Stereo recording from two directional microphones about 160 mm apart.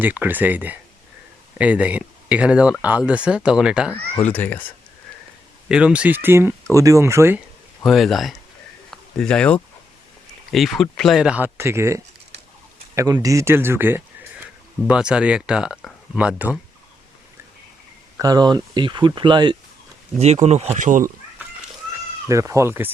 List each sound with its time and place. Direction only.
0.0 s speech: 10° right (ahead or behind)
3.9 s speech: 10° left (ahead or behind)
5.6 s speech: 5° right (ahead or behind)
7.9 s speech: centre (ahead or behind)
8.9 s a sound: 5° left (ahead or behind)
10.5 s speech: centre (ahead or behind)
18.2 s speech: 25° right (ahead or behind)
20.1 s speech: 45° right (ahead or behind)
22.3 s speech: 20° right (ahead or behind)